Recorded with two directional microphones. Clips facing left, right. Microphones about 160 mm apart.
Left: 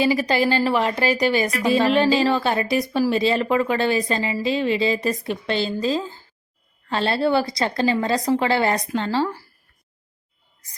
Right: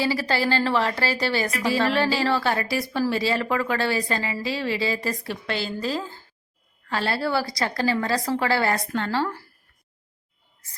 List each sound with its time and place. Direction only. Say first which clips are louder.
0.0 s a woman's voice: left 4 dB; 15° left (ahead or behind)